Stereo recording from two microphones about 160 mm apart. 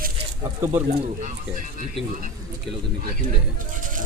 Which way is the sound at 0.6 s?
15° right (ahead or behind).